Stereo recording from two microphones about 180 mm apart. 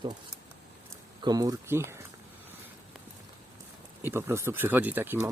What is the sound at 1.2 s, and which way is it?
Speech, 20° right (ahead or behind).